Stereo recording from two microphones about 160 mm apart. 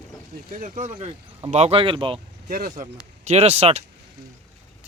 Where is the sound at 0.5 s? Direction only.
50° right (ahead or behind); by 2.1 s 35° right (ahead or behind).